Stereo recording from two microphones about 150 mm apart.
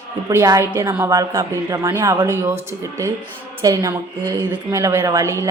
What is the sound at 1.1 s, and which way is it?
A man's voice, 25° right (ahead or behind).